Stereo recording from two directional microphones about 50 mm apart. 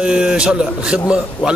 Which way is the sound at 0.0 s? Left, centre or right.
Centre.